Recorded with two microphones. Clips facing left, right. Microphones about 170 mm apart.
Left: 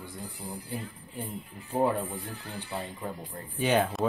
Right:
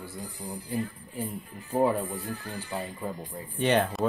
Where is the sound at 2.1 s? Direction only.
45° right (ahead or behind).